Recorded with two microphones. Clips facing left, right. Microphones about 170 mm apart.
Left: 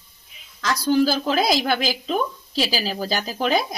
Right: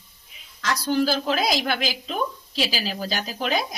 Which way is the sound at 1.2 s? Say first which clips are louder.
Left 3 dB; 35° left (ahead or behind).